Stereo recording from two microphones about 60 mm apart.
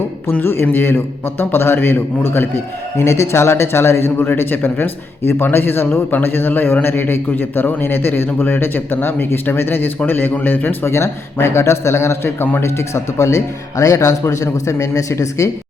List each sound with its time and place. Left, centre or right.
0.6 s a man's voice: left
3.0 s a man's voice: left